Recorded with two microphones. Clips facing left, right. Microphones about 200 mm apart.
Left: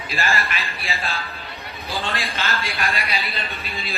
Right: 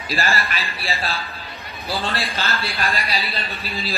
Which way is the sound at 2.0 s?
35° right (ahead or behind).